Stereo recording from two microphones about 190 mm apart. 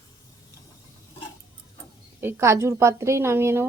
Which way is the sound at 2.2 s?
15° right (ahead or behind).